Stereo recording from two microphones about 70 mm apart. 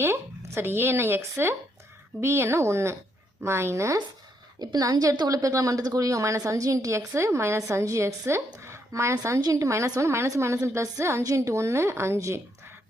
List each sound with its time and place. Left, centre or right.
0.0 s speech: right
4.6 s a woman's voice: right
5.4 s a woman's voice: right
8.5 s a sound: right
9.4 s a woman's voice: right
11.2 s a woman's voice: right